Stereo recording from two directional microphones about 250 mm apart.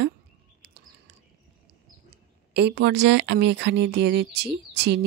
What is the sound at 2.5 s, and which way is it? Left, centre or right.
Speech, right.